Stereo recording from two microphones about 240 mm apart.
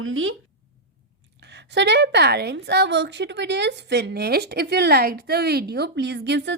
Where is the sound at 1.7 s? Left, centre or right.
Right.